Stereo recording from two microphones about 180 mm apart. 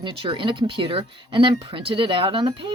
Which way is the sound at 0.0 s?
30° right (ahead or behind).